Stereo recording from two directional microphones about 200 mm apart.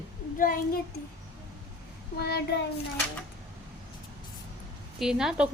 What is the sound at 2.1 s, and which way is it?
Child singing, 55° left (ahead or behind).